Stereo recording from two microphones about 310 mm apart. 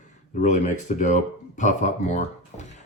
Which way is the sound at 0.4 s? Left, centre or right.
Left.